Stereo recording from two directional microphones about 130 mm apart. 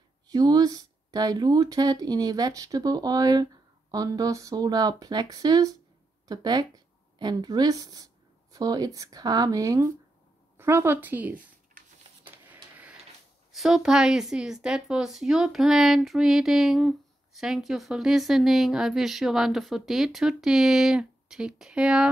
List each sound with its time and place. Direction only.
0.3 s a woman's voice: 30° right (ahead or behind); by 11.4 s 15° right (ahead or behind)
13.6 s speech: 5° right (ahead or behind)